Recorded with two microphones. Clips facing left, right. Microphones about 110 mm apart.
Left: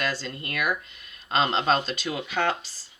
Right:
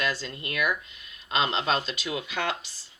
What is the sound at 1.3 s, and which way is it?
Speech, 45° left (ahead or behind).